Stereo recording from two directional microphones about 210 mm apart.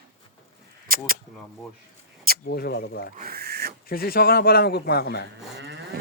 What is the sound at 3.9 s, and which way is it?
A man's voice, 45° left (ahead or behind).